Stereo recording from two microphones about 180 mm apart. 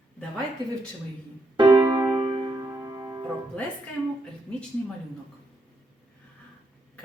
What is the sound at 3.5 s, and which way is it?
A woman's voice, 5° left (ahead or behind).